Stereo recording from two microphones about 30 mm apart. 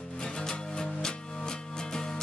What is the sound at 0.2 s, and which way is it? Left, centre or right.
Music, left.